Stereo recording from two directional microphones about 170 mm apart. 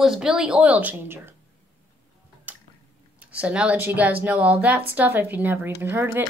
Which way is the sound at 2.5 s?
10° right (ahead or behind).